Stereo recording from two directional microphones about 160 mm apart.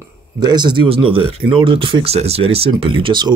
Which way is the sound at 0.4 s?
25° right (ahead or behind).